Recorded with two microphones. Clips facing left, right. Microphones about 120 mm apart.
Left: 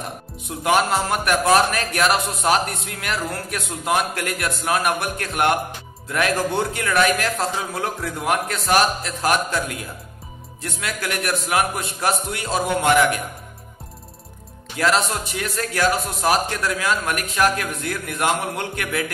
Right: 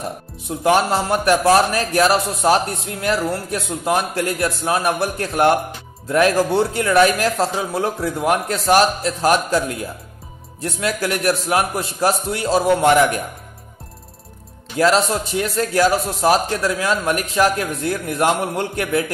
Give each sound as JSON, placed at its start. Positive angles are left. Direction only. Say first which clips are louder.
{"t": 0.7, "sound": "a man's voice", "louder": "right 3 dB", "side_deg": -35}
{"t": 14.8, "sound": "a man's voice", "louder": "right 4 dB", "side_deg": -35}